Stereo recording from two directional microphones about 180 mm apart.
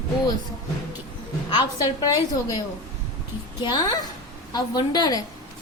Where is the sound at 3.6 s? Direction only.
25° left (ahead or behind).